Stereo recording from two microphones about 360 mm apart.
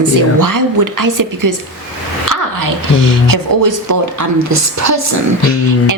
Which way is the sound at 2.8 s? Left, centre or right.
Right.